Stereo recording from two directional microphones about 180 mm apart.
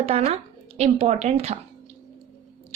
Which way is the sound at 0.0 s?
35° right (ahead or behind).